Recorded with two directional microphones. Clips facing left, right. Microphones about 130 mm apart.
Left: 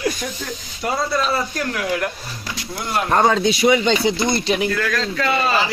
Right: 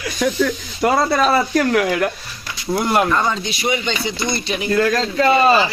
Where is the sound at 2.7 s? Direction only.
55° right (ahead or behind).